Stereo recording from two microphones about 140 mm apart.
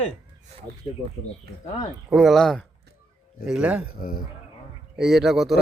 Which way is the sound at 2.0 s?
Centre (ahead or behind).